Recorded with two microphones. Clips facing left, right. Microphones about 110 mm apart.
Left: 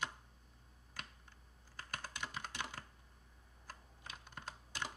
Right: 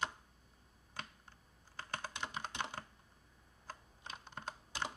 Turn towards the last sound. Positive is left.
turn(degrees=-25)  # may be behind; listen again after turning